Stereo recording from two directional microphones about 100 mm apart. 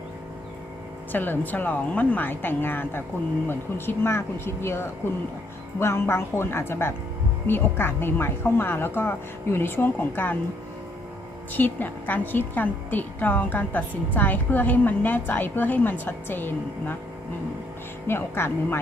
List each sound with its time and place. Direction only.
1.1 s a woman's voice: 20° left (ahead or behind)
11.5 s a woman's voice: 20° left (ahead or behind)
18.1 s a woman's voice: 25° left (ahead or behind)